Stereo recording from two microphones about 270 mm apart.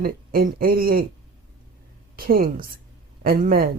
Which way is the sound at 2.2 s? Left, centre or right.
Right.